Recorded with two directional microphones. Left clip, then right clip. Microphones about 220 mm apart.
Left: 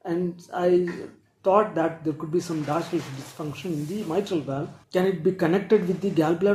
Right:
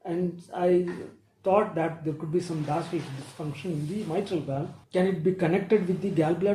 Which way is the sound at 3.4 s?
30° left (ahead or behind).